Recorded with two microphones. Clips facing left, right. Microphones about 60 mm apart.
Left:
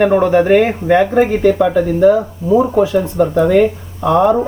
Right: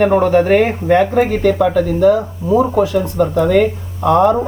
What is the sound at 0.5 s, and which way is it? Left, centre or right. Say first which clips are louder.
Speech: left 1 dB; centre.